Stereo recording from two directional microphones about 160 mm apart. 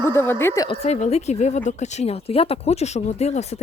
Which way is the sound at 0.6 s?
40° left (ahead or behind).